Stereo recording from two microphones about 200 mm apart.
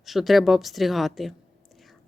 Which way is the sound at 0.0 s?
Centre (ahead or behind).